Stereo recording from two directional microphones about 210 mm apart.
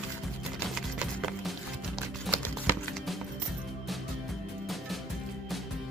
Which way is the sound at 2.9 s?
Centre (ahead or behind).